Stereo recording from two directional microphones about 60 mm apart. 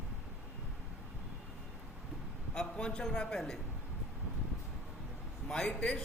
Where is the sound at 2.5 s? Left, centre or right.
Centre.